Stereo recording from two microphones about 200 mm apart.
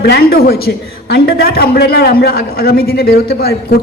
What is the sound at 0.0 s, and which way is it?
A man's voice, 50° left (ahead or behind).